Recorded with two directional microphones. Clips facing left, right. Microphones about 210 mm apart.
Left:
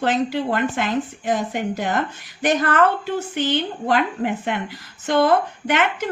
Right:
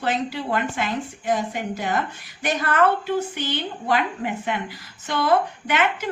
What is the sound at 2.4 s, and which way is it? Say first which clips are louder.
A woman's voice: left 3 dB; 50° left (ahead or behind).